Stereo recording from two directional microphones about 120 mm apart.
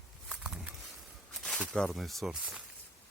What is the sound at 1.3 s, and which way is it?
Speech, 5° left (ahead or behind).